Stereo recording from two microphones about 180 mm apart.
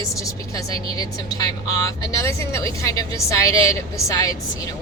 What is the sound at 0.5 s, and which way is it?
A woman's voice, 20° left (ahead or behind).